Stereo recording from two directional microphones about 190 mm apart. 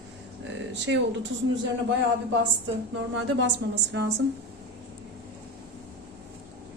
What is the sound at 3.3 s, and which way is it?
Speech, 65° right (ahead or behind).